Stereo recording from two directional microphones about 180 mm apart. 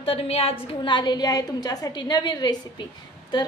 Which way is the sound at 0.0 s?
30° left (ahead or behind).